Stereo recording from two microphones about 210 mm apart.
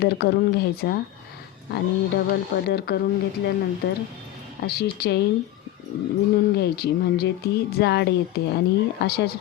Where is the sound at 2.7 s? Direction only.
50° left (ahead or behind).